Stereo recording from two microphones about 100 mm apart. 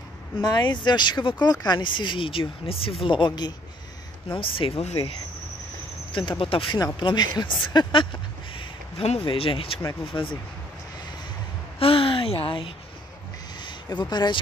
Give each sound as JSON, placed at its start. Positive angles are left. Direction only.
{"t": 0.4, "sound": "speech", "side_deg": 45}
{"t": 4.3, "sound": "speech", "side_deg": 65}
{"t": 6.1, "sound": "speech", "side_deg": 60}
{"t": 7.0, "sound": "speech", "side_deg": 50}
{"t": 9.2, "sound": "speech", "side_deg": 60}
{"t": 10.1, "sound": "speech", "side_deg": 55}
{"t": 11.8, "sound": "a sound", "side_deg": 65}
{"t": 13.6, "sound": "a sound", "side_deg": 50}